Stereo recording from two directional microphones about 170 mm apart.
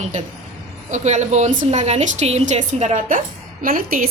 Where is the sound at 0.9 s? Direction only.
45° right (ahead or behind).